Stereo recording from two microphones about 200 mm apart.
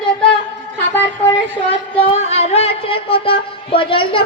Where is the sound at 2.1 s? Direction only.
30° left (ahead or behind).